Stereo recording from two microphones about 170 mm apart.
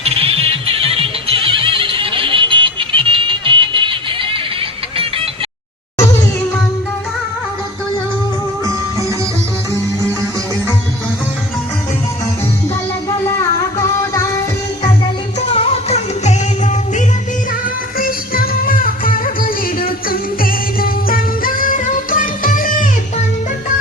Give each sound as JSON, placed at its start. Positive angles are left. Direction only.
{"t": 0.0, "sound": "music", "side_deg": -35}
{"t": 13.7, "sound": "music", "side_deg": 15}
{"t": 15.4, "sound": "music", "side_deg": 35}
{"t": 17.9, "sound": "music", "side_deg": 55}